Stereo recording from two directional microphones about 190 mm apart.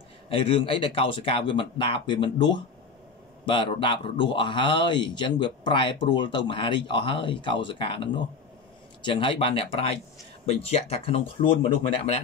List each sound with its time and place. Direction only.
0.3 s speech: 30° left (ahead or behind)